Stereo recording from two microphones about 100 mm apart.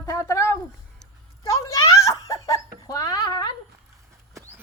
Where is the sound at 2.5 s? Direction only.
35° left (ahead or behind).